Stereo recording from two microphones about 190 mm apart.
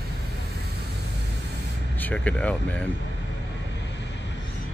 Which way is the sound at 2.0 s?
10° left (ahead or behind).